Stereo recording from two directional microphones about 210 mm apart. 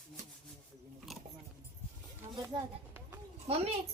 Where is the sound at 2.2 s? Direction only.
25° right (ahead or behind).